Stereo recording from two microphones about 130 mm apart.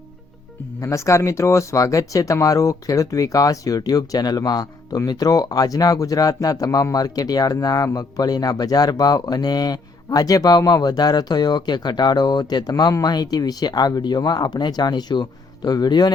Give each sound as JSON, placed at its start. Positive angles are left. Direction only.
{"t": 0.8, "sound": "speech", "side_deg": 25}